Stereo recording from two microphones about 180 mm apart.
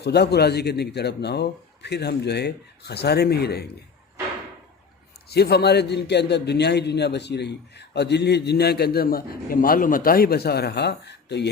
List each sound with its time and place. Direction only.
0.0 s speech: 65° left (ahead or behind)
5.3 s a man's voice: 65° left (ahead or behind)